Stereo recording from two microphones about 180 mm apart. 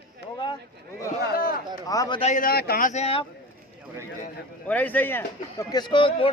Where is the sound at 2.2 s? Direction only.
50° left (ahead or behind).